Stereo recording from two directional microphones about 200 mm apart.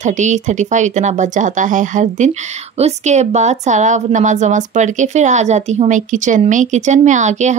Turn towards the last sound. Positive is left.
turn(degrees=-35)  # may be behind; listen again after turning